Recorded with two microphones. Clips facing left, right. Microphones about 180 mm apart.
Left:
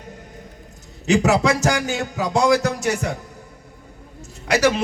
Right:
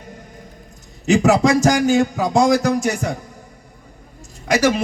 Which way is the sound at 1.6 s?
40° right (ahead or behind).